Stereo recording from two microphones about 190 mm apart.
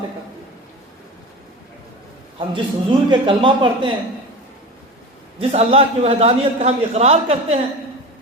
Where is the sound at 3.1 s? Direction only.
25° right (ahead or behind).